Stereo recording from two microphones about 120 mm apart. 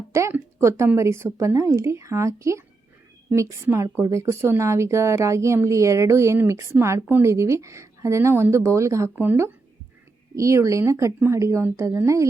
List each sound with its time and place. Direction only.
0.1 s speech: 20° right (ahead or behind)